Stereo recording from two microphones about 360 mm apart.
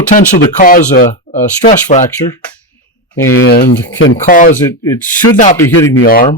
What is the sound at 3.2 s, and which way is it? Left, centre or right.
Speech, left.